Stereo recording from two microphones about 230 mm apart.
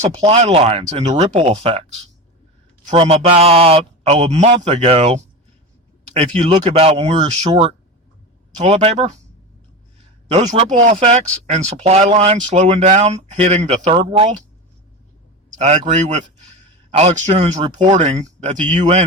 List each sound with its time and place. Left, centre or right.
0.2 s speech: right
10.2 s speech: right
15.5 s speech: right